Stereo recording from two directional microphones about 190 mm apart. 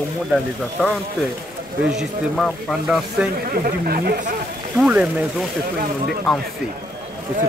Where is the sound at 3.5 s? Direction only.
50° right (ahead or behind).